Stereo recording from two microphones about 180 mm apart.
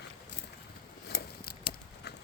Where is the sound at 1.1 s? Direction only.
60° left (ahead or behind).